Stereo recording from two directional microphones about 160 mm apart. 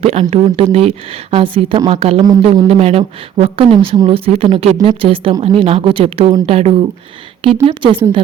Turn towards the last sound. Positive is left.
turn(degrees=-30)  # may be behind; listen again after turning